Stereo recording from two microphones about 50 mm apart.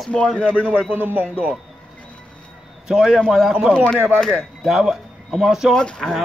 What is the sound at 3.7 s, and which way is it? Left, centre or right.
Speech, centre.